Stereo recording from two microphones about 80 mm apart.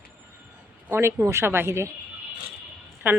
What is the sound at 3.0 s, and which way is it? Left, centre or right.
Speech, right.